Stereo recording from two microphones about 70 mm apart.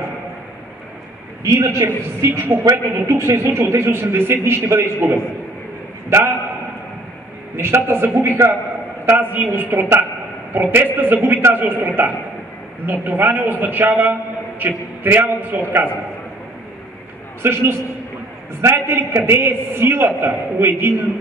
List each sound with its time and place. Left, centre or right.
1.4 s a man's voice: right
7.5 s a man's voice: right
17.4 s a man's voice: right